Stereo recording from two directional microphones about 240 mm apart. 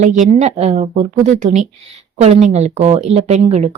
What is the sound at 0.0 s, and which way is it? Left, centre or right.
Speech, right.